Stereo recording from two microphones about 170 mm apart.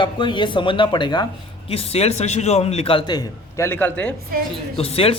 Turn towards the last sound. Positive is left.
turn(degrees=35)  # may be behind; listen again after turning